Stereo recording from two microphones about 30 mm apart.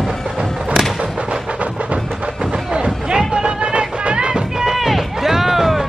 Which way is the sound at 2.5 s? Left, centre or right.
Right.